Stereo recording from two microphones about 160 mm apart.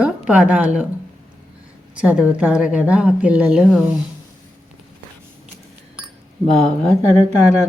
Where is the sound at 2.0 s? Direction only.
5° right (ahead or behind).